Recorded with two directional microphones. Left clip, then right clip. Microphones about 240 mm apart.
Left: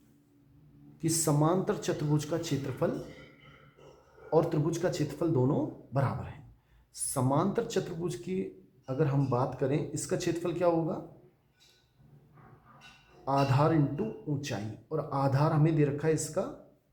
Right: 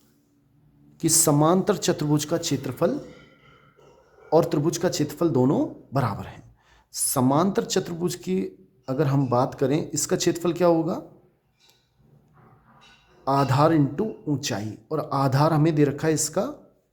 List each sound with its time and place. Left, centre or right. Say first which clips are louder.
0.9 s a man's voice: right 9 dB; right
4.3 s a man's voice: right 7 dB; right
13.2 s a man's voice: right 7 dB; right